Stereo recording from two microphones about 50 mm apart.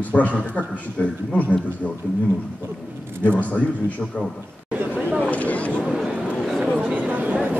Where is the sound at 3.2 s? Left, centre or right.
Left.